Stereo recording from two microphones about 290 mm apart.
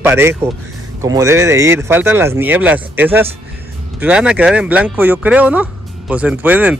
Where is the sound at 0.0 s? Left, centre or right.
Centre.